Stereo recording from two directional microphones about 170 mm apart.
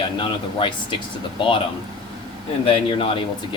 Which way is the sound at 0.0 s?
30° left (ahead or behind).